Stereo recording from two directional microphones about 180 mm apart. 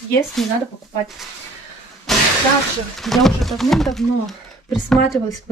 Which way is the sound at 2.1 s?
Centre (ahead or behind).